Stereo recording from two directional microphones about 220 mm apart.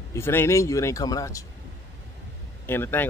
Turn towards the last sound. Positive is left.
turn(degrees=10)  # may be behind; listen again after turning